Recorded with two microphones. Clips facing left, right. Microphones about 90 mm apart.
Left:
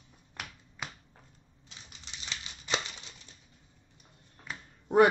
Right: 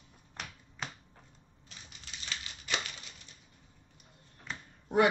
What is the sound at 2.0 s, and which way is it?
Scissors, 25° left (ahead or behind).